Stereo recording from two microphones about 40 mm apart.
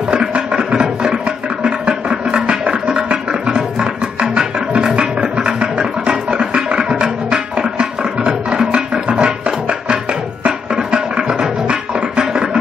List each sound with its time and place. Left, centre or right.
0.3 s music: right